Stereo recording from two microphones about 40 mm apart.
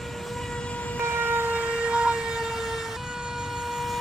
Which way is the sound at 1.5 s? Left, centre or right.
Right.